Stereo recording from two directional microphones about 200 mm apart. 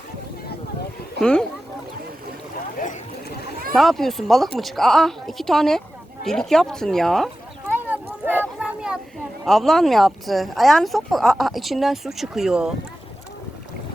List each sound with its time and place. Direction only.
1.2 s speech: 5° left (ahead or behind)
2.7 s boat: 40° left (ahead or behind)
3.8 s speech: centre (ahead or behind)
7.7 s a sound: 10° right (ahead or behind)
8.5 s child singing: 5° right (ahead or behind)
9.5 s speech: centre (ahead or behind)